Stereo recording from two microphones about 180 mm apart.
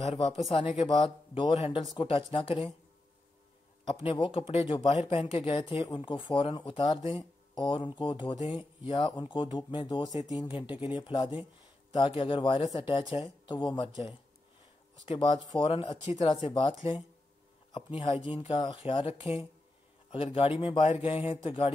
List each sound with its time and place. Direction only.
0.1 s speech: 30° left (ahead or behind)
0.8 s speech: 25° left (ahead or behind)
3.9 s speech: 30° left (ahead or behind)
15.0 s speech: 25° left (ahead or behind)